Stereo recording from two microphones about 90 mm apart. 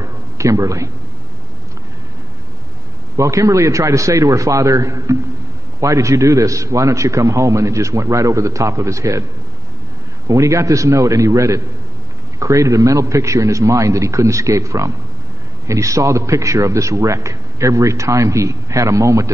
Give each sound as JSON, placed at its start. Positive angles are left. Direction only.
{"t": 0.0, "sound": "a sound", "side_deg": -35}
{"t": 3.2, "sound": "a man's voice", "side_deg": -35}
{"t": 10.2, "sound": "a man's voice", "side_deg": -35}